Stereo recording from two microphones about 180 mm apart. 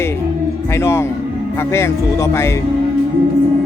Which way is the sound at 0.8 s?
15° left (ahead or behind).